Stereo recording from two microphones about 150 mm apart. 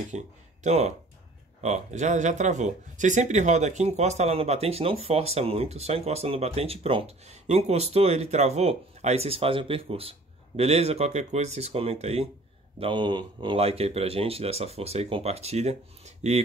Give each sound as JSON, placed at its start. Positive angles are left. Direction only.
{"t": 0.1, "sound": "speech", "side_deg": -50}